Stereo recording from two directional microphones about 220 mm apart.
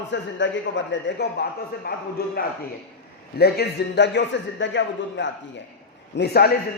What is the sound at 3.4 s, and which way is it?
A man's voice, 45° left (ahead or behind).